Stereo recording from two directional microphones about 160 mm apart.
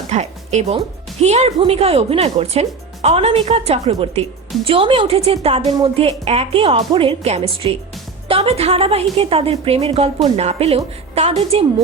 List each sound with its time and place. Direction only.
0.1 s music: 45° right (ahead or behind)
1.2 s a woman's voice: 45° right (ahead or behind)